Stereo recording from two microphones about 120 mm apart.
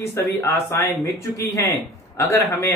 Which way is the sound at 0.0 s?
20° left (ahead or behind).